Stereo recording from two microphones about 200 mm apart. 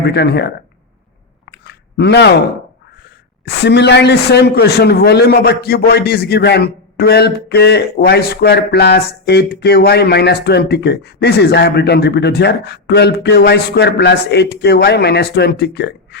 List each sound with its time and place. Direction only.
0.0 s a woman's voice: 55° left (ahead or behind)
1.5 s chewing: 55° left (ahead or behind)
3.4 s a woman's voice: 60° left (ahead or behind)